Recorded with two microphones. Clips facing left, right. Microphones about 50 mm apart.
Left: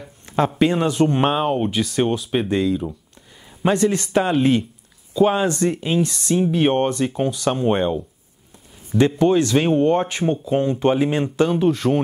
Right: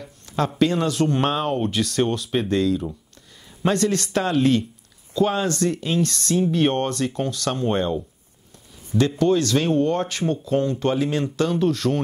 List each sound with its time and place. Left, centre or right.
0.6 s speech: left
9.2 s speech: left